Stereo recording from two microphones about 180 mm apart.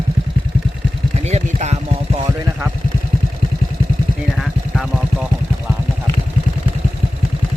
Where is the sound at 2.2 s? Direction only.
15° right (ahead or behind).